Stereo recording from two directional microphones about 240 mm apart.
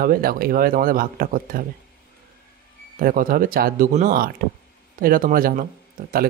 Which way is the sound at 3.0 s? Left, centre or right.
Right.